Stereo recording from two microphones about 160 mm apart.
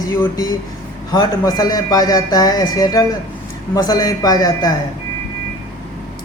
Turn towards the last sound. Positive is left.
turn(degrees=25)  # may be behind; listen again after turning